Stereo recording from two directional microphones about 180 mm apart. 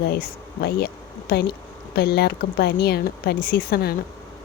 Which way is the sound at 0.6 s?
60° left (ahead or behind).